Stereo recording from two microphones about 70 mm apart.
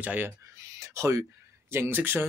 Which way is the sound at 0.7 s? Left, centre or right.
Right.